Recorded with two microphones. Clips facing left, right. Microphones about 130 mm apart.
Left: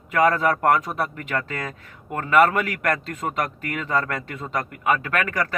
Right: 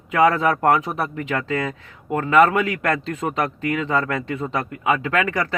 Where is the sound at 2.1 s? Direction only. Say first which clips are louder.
Right 2 dB; 25° right (ahead or behind).